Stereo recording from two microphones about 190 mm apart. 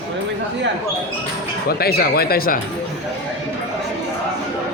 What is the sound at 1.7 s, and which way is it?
Speech, 55° left (ahead or behind).